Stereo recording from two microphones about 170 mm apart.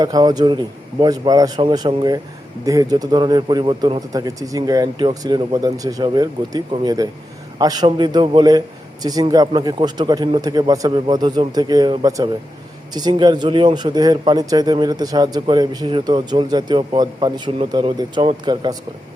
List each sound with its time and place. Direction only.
0.0 s speech: 25° right (ahead or behind)